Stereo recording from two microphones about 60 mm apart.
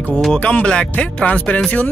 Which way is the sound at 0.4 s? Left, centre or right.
Left.